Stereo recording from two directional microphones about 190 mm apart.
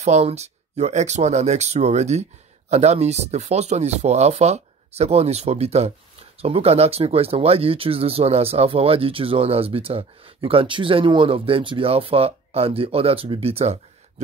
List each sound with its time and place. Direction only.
0.0 s speech: 35° right (ahead or behind)